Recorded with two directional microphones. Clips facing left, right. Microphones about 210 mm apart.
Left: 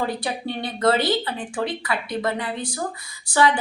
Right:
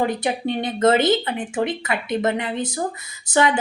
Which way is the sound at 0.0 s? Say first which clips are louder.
Right 4 dB; 20° right (ahead or behind).